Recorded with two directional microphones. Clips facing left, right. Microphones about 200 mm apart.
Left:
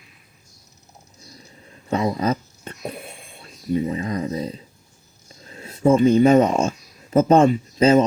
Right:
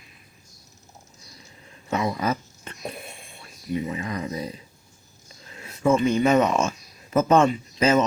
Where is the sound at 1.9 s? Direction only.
30° left (ahead or behind).